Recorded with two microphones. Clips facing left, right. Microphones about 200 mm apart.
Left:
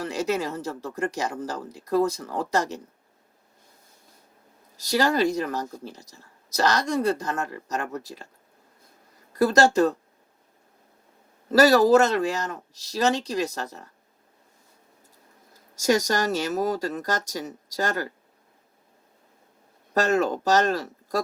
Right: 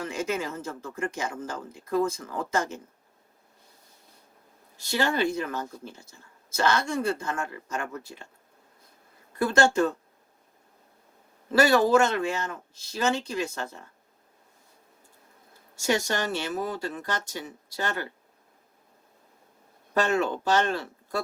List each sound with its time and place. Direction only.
0.0 s speech: 35° left (ahead or behind)
4.8 s speech: 40° left (ahead or behind)
9.3 s speech: 35° left (ahead or behind)
11.5 s speech: 40° left (ahead or behind)
15.7 s speech: 40° left (ahead or behind)
19.9 s speech: 40° left (ahead or behind)